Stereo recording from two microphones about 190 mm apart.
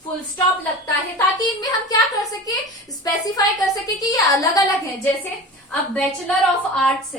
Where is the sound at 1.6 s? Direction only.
20° left (ahead or behind).